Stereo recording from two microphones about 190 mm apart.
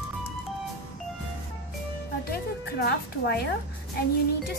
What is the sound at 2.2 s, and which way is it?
Music, 55° left (ahead or behind).